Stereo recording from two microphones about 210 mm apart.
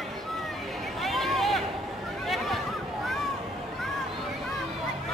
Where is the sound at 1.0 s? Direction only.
Centre (ahead or behind).